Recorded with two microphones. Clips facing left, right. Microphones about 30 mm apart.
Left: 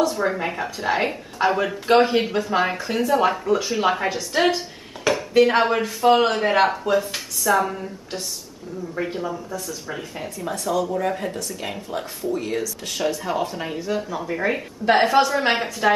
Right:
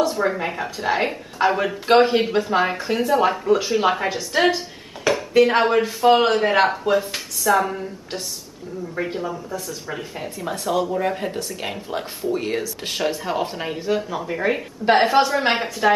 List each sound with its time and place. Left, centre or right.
0.2 s speech: centre
3.1 s speech: centre
10.5 s speech: right
13.0 s speech: centre